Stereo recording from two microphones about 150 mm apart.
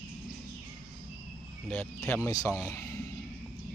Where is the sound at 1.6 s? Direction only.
10° left (ahead or behind).